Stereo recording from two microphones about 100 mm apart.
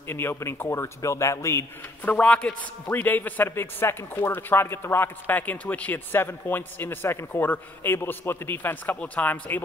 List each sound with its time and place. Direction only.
0.1 s a man's voice: 25° left (ahead or behind)
2.1 s a man's voice: 15° left (ahead or behind)